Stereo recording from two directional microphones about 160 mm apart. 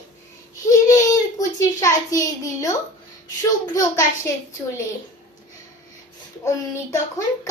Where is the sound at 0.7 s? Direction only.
20° left (ahead or behind).